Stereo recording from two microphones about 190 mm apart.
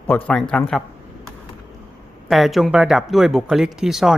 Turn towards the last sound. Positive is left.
turn(degrees=0)  # may be behind; listen again after turning